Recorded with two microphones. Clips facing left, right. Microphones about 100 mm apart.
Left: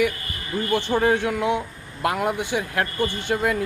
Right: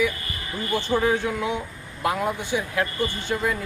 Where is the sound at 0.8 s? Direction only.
65° left (ahead or behind).